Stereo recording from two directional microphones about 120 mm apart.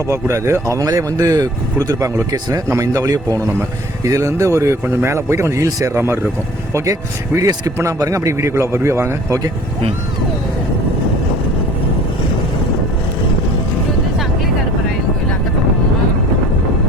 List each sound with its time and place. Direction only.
0.1 s speech: 25° right (ahead or behind)
7.3 s speech: 25° right (ahead or behind)